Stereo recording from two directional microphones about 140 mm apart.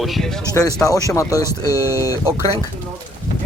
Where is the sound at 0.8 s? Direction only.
25° left (ahead or behind).